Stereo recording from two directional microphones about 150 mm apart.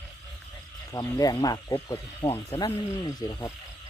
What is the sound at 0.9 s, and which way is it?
Speech, 20° left (ahead or behind).